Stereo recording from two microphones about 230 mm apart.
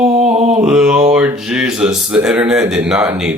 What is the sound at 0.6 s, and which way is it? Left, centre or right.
Speech, centre.